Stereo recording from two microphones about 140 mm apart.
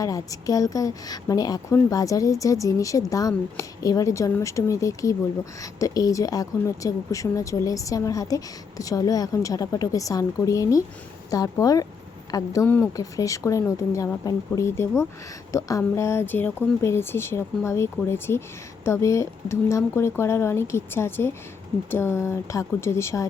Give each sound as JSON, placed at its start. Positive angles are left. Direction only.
{"t": 0.0, "sound": "speech", "side_deg": 25}
{"t": 12.6, "sound": "speech", "side_deg": 15}
{"t": 13.0, "sound": "speech", "side_deg": 25}